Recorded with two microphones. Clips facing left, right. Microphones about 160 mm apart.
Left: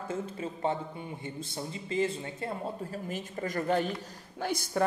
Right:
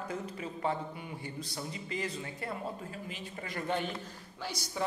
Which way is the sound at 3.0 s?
45° left (ahead or behind).